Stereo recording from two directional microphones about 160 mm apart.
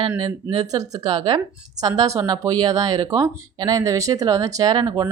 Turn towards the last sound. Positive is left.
turn(degrees=-30)  # may be behind; listen again after turning